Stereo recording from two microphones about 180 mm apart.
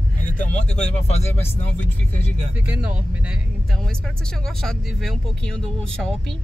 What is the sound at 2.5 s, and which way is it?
Speech, 10° right (ahead or behind).